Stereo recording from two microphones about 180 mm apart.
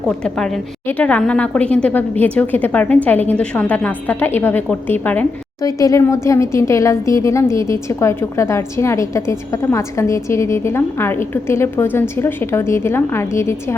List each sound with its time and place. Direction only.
0.3 s speech: 5° left (ahead or behind)